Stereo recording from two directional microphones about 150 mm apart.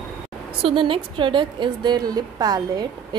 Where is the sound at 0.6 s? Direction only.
35° right (ahead or behind).